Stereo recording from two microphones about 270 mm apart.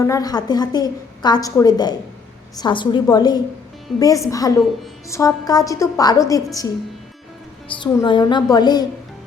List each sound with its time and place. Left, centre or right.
0.0 s a woman's voice: centre
7.7 s a woman's voice: centre